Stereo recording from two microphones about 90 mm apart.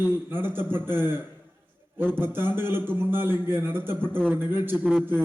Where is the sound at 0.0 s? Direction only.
25° right (ahead or behind).